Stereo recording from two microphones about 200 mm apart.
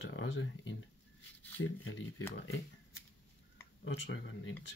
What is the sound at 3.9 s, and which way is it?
Speech, 65° left (ahead or behind).